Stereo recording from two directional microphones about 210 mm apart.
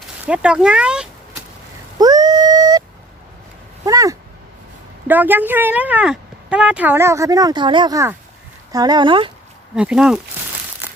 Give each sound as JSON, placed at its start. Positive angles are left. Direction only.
{"t": 0.3, "sound": "speech", "side_deg": -5}
{"t": 2.0, "sound": "dog", "side_deg": -20}
{"t": 3.8, "sound": "a sound", "side_deg": -15}
{"t": 5.0, "sound": "speech", "side_deg": -10}
{"t": 9.7, "sound": "speech", "side_deg": -5}
{"t": 10.8, "sound": "crumpling", "side_deg": -5}